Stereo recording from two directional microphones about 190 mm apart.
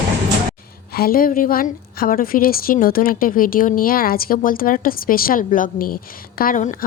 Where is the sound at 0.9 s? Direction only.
50° left (ahead or behind).